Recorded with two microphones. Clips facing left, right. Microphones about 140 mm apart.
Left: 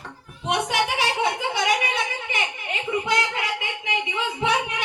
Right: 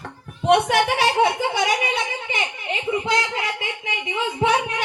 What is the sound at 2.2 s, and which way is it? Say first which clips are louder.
Speech: right 2 dB; 30° right (ahead or behind).